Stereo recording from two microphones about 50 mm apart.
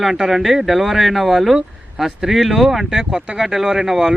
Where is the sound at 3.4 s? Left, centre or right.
Centre.